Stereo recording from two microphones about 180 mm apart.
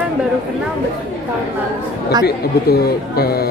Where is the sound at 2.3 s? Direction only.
60° left (ahead or behind).